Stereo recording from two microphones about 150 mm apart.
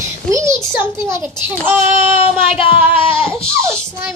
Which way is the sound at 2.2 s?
40° left (ahead or behind).